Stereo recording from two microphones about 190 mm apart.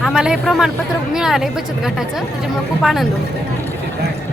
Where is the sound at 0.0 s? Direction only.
5° right (ahead or behind).